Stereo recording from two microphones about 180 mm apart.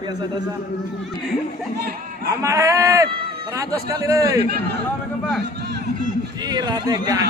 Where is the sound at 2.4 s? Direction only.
15° right (ahead or behind).